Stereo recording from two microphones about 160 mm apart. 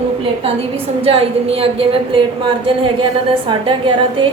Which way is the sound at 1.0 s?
35° right (ahead or behind).